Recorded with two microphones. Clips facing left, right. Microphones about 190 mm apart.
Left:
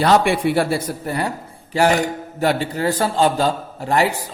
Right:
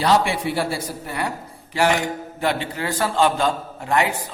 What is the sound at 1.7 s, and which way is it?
A man's voice, 40° left (ahead or behind).